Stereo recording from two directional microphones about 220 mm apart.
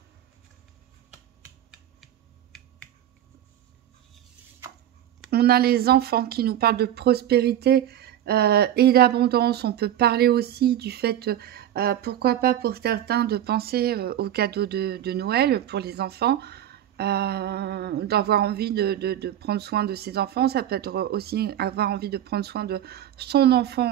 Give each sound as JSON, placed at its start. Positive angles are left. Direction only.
{"t": 1.4, "sound": "typing", "side_deg": -5}
{"t": 5.3, "sound": "speech", "side_deg": -45}